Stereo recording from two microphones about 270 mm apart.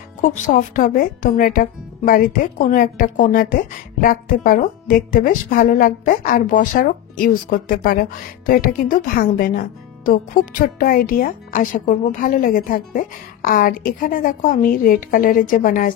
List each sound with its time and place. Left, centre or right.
0.2 s speech: left